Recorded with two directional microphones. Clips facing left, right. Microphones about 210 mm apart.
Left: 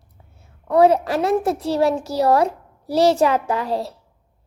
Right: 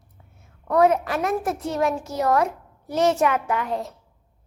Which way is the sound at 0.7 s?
30° left (ahead or behind).